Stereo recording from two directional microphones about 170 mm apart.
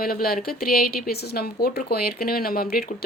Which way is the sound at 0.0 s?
60° left (ahead or behind).